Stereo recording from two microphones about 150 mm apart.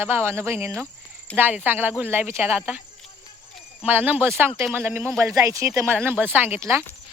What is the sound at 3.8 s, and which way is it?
Speech, 10° right (ahead or behind).